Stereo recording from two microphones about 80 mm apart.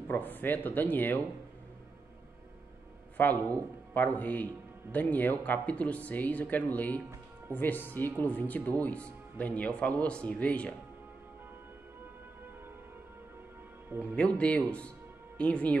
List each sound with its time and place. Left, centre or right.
0.1 s speech: left
3.2 s speech: left
14.1 s speech: centre